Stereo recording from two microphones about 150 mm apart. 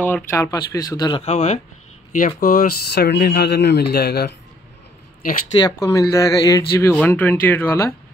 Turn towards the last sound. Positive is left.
turn(degrees=15)  # may be behind; listen again after turning